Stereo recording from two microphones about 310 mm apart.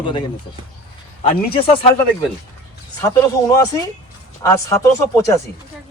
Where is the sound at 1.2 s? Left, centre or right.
Centre.